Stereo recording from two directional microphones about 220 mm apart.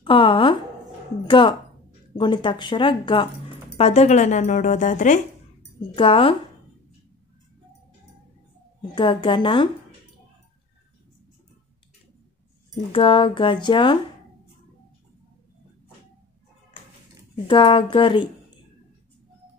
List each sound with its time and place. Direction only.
0.0 s a woman's voice: 20° left (ahead or behind)
5.9 s speech: 25° left (ahead or behind)
8.9 s speech: 20° left (ahead or behind)
12.9 s speech: 25° left (ahead or behind)
17.5 s speech: 25° left (ahead or behind)